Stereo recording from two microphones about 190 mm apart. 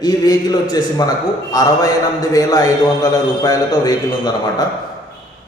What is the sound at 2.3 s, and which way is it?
A man's voice, 20° left (ahead or behind).